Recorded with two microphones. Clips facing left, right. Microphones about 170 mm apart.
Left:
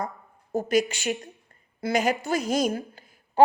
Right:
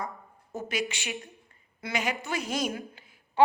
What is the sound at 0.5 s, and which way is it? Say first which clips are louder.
A woman's voice: left 9 dB; 40° left (ahead or behind).